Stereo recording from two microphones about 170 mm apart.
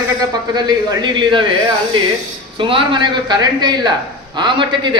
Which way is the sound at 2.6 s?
30° right (ahead or behind).